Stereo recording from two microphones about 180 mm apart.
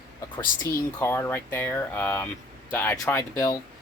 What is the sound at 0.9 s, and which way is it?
Speech, 10° left (ahead or behind).